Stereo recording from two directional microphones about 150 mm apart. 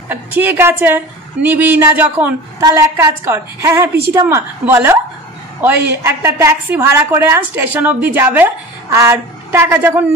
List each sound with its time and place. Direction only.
0.1 s a woman's voice: 15° right (ahead or behind)